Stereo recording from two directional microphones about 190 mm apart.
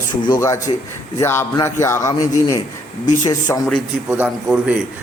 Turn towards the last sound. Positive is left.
turn(degrees=-5)  # may be behind; listen again after turning